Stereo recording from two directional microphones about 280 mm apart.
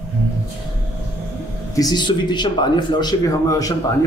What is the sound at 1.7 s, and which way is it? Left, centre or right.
Speech, centre.